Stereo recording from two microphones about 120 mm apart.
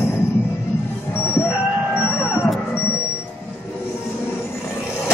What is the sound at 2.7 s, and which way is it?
Music, 20° left (ahead or behind).